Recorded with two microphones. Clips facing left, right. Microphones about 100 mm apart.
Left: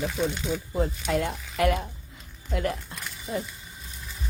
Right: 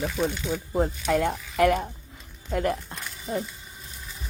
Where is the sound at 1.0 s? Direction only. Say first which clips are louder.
Right 3 dB; 50° right (ahead or behind).